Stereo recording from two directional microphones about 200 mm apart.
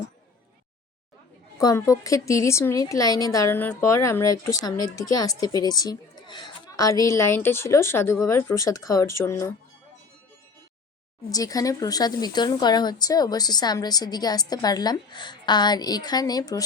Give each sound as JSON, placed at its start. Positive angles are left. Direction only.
{"t": 1.5, "sound": "a woman's voice", "side_deg": 15}
{"t": 11.3, "sound": "speech", "side_deg": 20}